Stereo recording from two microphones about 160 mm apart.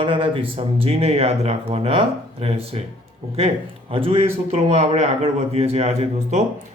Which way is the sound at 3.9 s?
35° right (ahead or behind).